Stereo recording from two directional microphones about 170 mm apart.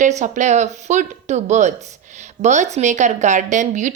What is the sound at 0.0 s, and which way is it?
Speech, 45° right (ahead or behind).